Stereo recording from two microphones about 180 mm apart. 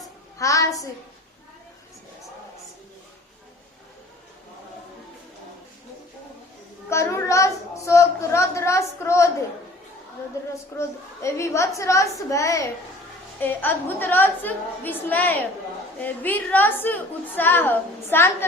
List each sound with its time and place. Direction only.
0.3 s a woman's voice: 20° left (ahead or behind)
6.9 s a woman's voice: 15° left (ahead or behind)
10.8 s a woman's voice: 15° left (ahead or behind)